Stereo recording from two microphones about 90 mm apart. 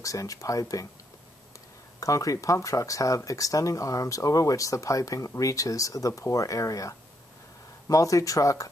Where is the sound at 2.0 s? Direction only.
40° left (ahead or behind).